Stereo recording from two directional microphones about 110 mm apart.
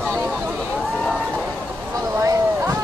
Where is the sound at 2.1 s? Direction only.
25° right (ahead or behind).